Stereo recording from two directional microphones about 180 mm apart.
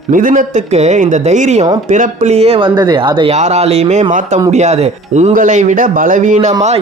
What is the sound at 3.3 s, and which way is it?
A man's voice, 35° right (ahead or behind).